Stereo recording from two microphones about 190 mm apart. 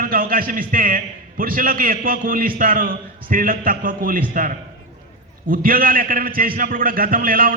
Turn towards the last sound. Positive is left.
turn(degrees=-50)  # may be behind; listen again after turning